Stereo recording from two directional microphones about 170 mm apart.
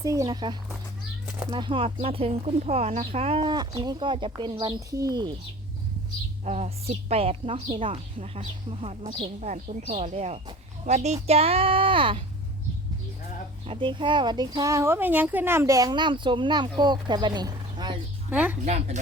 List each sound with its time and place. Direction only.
0.0 s speech: 20° right (ahead or behind)
6.4 s a woman's voice: 40° right (ahead or behind)
13.7 s speech: 30° right (ahead or behind)
18.3 s a woman's voice: 10° right (ahead or behind)
18.6 s a woman's voice: 40° right (ahead or behind)